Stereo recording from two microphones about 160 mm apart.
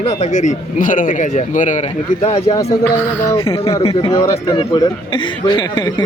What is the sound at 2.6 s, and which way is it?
Speech, 20° left (ahead or behind).